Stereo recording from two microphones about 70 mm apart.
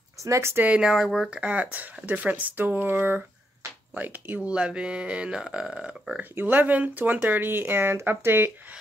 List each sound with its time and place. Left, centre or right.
0.2 s speech: right
0.7 s speech: centre
1.3 s speech: centre
4.6 s speech: centre
6.4 s speech: right